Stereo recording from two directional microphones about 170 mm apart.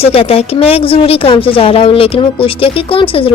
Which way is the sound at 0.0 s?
35° left (ahead or behind).